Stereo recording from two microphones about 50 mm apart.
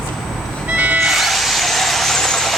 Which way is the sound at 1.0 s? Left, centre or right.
Centre.